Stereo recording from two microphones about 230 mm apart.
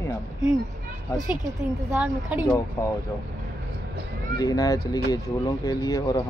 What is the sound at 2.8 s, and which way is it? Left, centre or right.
Speech, centre.